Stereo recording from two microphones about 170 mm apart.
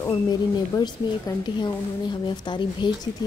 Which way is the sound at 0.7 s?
25° left (ahead or behind).